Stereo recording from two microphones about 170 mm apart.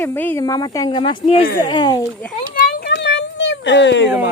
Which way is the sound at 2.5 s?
85° left.